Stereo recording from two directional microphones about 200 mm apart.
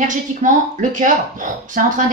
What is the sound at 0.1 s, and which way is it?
Speech, 40° right (ahead or behind).